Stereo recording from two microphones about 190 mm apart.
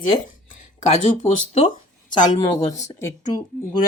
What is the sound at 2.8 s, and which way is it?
Speech, 15° left (ahead or behind).